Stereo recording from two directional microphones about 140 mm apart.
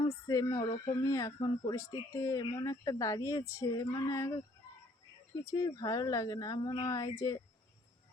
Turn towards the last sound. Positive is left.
turn(degrees=25)  # may be behind; listen again after turning